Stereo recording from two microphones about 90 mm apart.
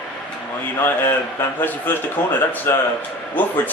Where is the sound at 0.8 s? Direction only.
25° left (ahead or behind).